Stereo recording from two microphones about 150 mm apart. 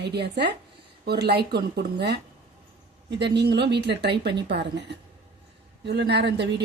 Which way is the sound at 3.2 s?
90° right.